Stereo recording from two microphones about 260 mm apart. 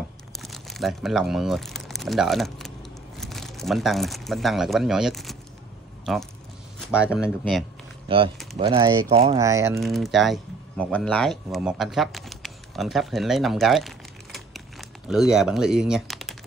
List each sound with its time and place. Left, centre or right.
0.4 s speech: centre
8.1 s speech: right
9.8 s speech: centre